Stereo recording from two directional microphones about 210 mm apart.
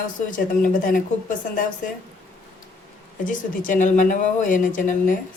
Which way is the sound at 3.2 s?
40° left (ahead or behind).